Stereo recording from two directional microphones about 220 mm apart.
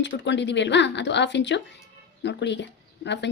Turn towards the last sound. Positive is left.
turn(degrees=55)  # may be behind; listen again after turning